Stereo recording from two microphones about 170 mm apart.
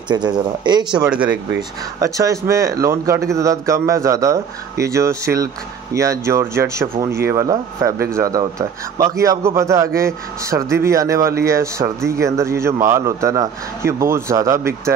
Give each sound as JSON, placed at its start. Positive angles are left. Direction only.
{"t": 0.1, "sound": "speech", "side_deg": -25}
{"t": 1.0, "sound": "a man's voice", "side_deg": -5}
{"t": 2.0, "sound": "a man's voice", "side_deg": -20}